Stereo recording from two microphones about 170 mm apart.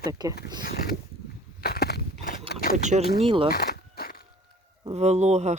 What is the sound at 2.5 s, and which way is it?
Vehicle, 60° left (ahead or behind).